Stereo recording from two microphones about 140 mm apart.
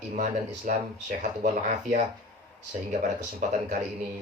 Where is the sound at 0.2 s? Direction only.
65° right (ahead or behind).